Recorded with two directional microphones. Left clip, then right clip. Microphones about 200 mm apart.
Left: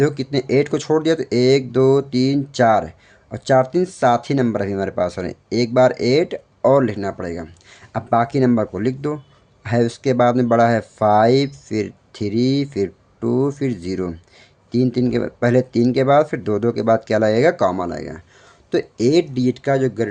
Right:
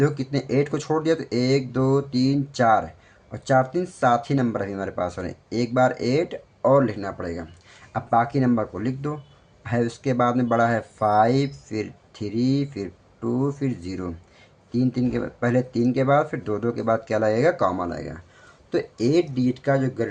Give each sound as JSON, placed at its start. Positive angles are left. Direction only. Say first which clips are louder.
{"t": 0.0, "sound": "speech", "louder": "left 5 dB", "side_deg": 40}